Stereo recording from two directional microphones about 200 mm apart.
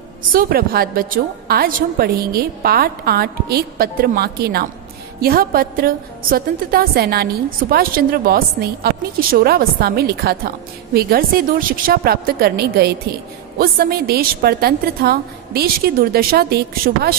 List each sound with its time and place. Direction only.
0.3 s a woman's voice: 45° right (ahead or behind)